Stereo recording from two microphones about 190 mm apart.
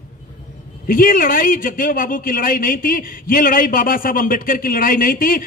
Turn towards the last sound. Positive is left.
turn(degrees=50)  # may be behind; listen again after turning